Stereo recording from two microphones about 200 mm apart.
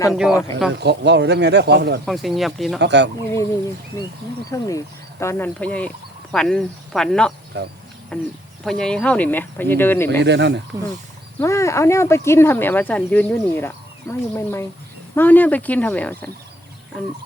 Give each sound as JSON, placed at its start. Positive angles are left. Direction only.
{"t": 0.1, "sound": "speech", "side_deg": 0}
{"t": 0.7, "sound": "speech", "side_deg": -60}
{"t": 2.0, "sound": "speech", "side_deg": 0}
{"t": 2.7, "sound": "speech", "side_deg": -60}
{"t": 4.5, "sound": "speech", "side_deg": 15}
{"t": 7.5, "sound": "speech", "side_deg": -55}
{"t": 8.1, "sound": "speech", "side_deg": 5}
{"t": 10.2, "sound": "speech", "side_deg": -60}
{"t": 11.3, "sound": "speech", "side_deg": 15}